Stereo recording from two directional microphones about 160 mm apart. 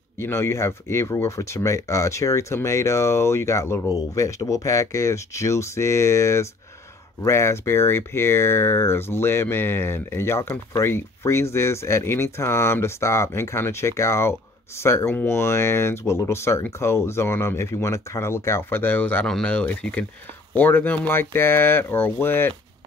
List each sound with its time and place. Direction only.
0.2 s speech: 15° left (ahead or behind)